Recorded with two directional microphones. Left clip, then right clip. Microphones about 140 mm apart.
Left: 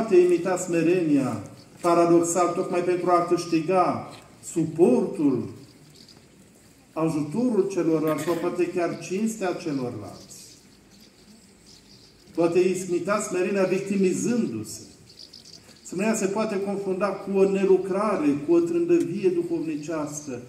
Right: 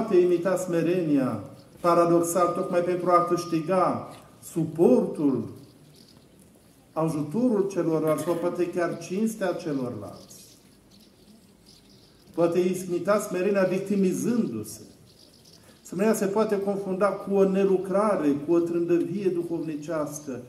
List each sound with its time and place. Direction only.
0.1 s a man's voice: 10° right (ahead or behind)
6.9 s a man's voice: 15° right (ahead or behind)
12.4 s a man's voice: 15° right (ahead or behind)
15.9 s a man's voice: 15° right (ahead or behind)